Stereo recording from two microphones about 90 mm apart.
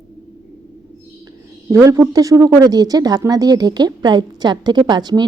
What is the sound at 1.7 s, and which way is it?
Speech, 35° right (ahead or behind).